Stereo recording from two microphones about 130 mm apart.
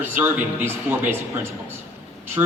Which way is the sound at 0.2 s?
15° right (ahead or behind).